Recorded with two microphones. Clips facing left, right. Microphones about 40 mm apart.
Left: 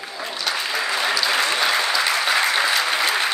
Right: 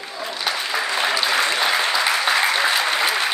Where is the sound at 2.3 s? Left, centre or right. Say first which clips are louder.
Even; centre.